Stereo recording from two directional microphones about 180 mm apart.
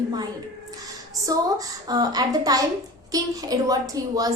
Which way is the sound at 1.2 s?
20° right (ahead or behind).